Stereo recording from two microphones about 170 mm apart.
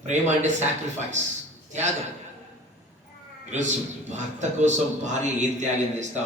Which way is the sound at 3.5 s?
40° right (ahead or behind).